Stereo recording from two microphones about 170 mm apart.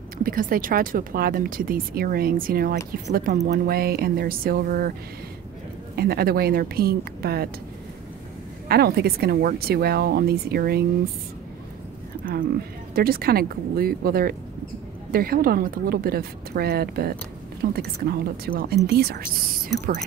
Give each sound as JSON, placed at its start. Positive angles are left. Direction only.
{"t": 0.2, "sound": "speech", "side_deg": -55}
{"t": 5.9, "sound": "speech", "side_deg": -65}
{"t": 8.6, "sound": "speech", "side_deg": -65}
{"t": 12.9, "sound": "speech", "side_deg": -60}